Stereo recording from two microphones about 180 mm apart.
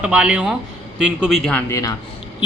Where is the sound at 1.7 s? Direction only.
20° left (ahead or behind).